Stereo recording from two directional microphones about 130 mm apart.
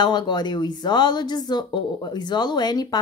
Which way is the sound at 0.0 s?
35° left (ahead or behind).